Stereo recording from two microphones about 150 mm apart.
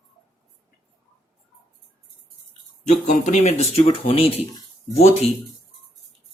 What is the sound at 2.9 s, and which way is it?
Speech, 50° left (ahead or behind).